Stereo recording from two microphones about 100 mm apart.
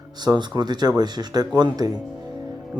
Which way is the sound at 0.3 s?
45° right (ahead or behind).